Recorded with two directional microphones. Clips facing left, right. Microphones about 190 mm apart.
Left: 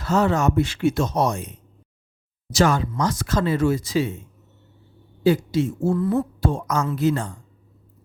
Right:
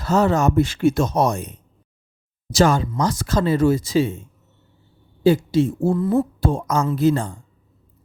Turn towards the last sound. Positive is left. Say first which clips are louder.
# right 3 dB
turn(degrees=-30)  # may be behind; listen again after turning